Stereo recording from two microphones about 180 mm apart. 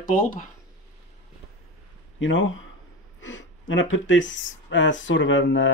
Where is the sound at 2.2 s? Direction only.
90° left.